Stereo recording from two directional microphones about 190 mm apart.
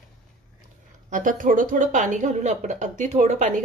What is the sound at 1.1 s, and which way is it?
A woman's voice, 45° right (ahead or behind).